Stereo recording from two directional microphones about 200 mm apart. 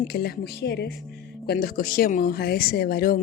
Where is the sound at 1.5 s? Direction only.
45° left (ahead or behind).